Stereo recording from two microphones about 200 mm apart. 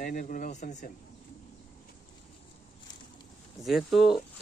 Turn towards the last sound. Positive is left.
turn(degrees=0)  # may be behind; listen again after turning